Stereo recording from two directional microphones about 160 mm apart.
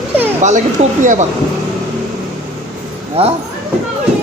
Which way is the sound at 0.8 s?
45° right (ahead or behind).